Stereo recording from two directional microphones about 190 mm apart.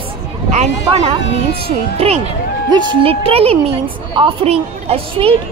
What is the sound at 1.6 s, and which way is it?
Speech, 30° right (ahead or behind).